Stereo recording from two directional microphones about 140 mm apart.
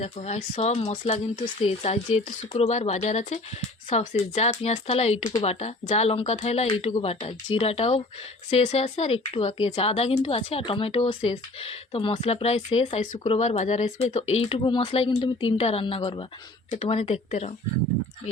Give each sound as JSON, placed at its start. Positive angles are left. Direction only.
{"t": 0.2, "sound": "a woman's voice", "side_deg": 60}
{"t": 16.0, "sound": "a woman's voice", "side_deg": 30}
{"t": 16.6, "sound": "speech", "side_deg": 50}